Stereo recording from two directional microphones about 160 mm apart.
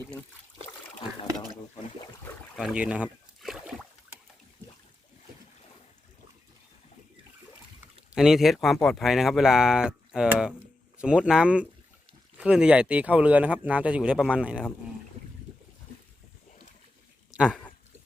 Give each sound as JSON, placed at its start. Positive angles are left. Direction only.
{"t": 2.6, "sound": "speech", "side_deg": -5}
{"t": 8.1, "sound": "speech", "side_deg": 0}
{"t": 17.3, "sound": "speech", "side_deg": -5}